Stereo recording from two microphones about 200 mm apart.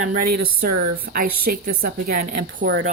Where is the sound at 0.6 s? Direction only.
45° right (ahead or behind).